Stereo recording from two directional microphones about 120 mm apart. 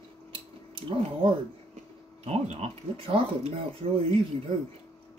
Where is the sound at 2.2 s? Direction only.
65° right (ahead or behind).